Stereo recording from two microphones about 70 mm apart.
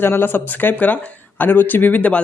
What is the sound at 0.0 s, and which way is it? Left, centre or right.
Speech, left.